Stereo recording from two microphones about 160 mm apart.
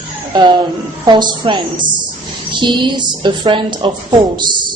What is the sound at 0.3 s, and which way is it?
A woman's voice, 30° right (ahead or behind).